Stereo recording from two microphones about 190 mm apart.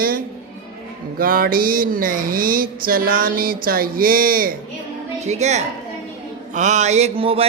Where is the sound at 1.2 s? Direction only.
50° right (ahead or behind).